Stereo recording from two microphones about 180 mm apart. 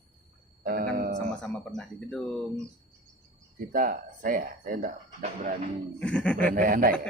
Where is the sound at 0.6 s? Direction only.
55° right (ahead or behind).